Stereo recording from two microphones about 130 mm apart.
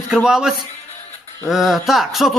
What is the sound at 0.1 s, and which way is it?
Speech, 5° right (ahead or behind).